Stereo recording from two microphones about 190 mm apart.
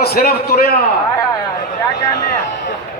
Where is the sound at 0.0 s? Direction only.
55° left (ahead or behind).